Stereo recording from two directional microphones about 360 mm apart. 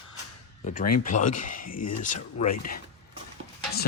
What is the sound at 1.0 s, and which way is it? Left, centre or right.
Speech, left.